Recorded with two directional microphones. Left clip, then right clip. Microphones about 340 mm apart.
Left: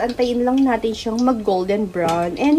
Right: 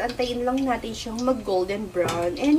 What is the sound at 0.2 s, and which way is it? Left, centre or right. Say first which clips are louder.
Speech: left 9 dB; left.